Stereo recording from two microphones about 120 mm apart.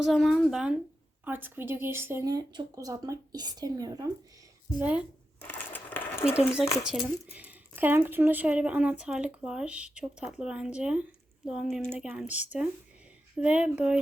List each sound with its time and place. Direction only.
0.0 s a child's voice: 5° right (ahead or behind); by 2.2 s 20° right (ahead or behind)
2.2 s speech: 35° right (ahead or behind)
4.8 s speech: 10° right (ahead or behind)
5.4 s a sound: 15° left (ahead or behind)
6.8 s speech: 10° right (ahead or behind)